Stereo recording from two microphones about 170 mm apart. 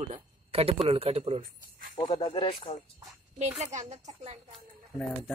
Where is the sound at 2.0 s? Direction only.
25° left (ahead or behind).